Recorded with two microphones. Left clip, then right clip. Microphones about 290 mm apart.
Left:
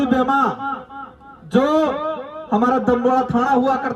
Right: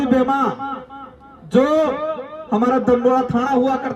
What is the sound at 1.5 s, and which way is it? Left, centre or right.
A man's voice, right.